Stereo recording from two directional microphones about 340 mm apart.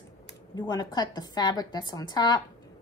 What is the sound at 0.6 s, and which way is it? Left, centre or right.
A woman's voice, centre.